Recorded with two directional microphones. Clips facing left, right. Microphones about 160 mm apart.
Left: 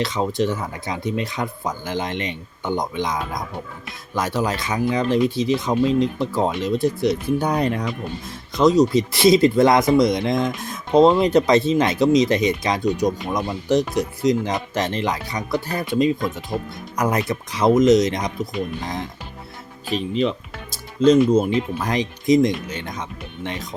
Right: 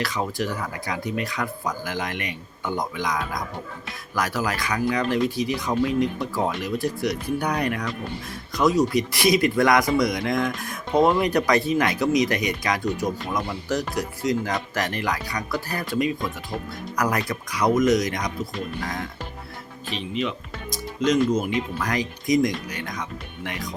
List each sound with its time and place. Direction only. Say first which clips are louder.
0.0 s speech: left 5 dB; 20° left (ahead or behind)
19.9 s speech: left 6 dB; 35° left (ahead or behind)